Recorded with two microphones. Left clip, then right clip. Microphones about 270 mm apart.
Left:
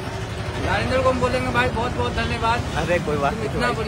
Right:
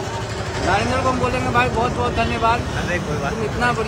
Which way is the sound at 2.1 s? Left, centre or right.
Centre.